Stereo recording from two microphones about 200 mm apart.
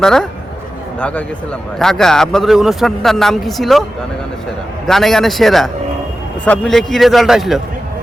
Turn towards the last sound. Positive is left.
turn(degrees=0)  # may be behind; listen again after turning